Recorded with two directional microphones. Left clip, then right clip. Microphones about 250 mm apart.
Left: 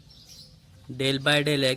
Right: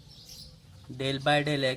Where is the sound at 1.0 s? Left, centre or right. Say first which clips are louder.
Left 3 dB; left.